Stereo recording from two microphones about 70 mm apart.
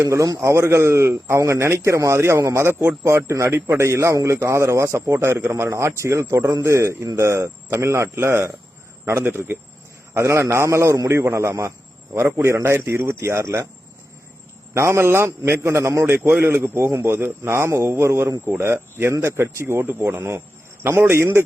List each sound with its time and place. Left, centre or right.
0.0 s a man's voice: right
14.7 s a man's voice: right
16.1 s a man's voice: right